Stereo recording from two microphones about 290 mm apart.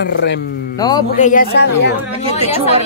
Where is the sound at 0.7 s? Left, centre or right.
Centre.